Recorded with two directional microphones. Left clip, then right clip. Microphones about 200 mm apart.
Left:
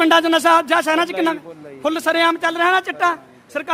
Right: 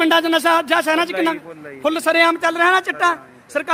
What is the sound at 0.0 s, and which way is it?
A man's voice, 5° left (ahead or behind).